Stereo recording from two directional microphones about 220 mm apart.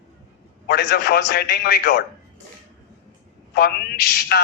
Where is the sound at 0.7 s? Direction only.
45° left (ahead or behind).